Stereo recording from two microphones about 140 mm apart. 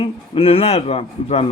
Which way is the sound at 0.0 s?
40° left (ahead or behind).